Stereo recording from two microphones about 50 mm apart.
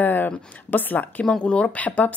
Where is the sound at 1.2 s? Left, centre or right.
Left.